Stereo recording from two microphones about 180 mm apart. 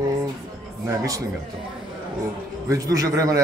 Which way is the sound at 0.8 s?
20° right (ahead or behind).